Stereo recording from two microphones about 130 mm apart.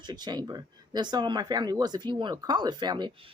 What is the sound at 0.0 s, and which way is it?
A woman's voice, 35° right (ahead or behind).